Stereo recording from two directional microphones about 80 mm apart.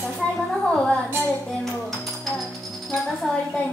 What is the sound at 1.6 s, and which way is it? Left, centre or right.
Music, centre.